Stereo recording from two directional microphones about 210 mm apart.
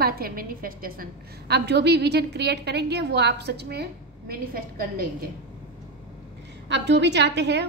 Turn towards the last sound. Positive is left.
turn(degrees=-55)  # may be behind; listen again after turning